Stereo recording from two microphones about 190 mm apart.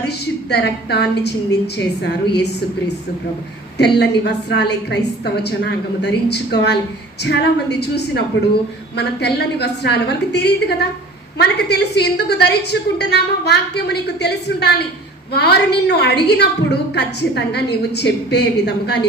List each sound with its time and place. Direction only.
0.5 s a woman's voice: 60° left (ahead or behind)
3.8 s a woman's voice: 60° left (ahead or behind)